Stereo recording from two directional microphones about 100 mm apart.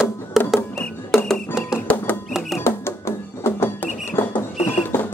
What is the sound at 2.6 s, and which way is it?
Music, 25° left (ahead or behind).